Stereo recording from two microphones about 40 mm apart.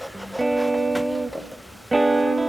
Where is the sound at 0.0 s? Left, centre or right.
Centre.